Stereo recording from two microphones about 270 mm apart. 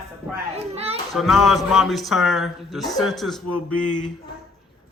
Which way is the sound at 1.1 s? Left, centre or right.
Centre.